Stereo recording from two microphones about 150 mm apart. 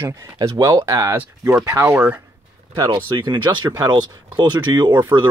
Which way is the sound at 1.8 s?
10° right (ahead or behind).